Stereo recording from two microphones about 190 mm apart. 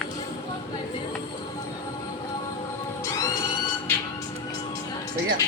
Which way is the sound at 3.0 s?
15° left (ahead or behind).